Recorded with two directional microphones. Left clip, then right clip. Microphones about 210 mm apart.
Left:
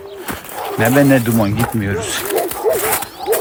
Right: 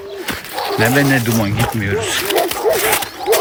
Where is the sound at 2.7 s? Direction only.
Centre (ahead or behind).